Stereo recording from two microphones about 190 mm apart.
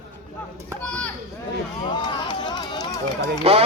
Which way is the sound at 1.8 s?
25° left (ahead or behind).